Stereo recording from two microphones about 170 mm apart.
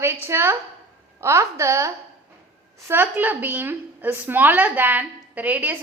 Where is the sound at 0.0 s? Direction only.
15° right (ahead or behind).